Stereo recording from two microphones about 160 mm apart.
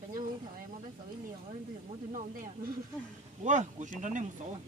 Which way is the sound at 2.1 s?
60° right (ahead or behind).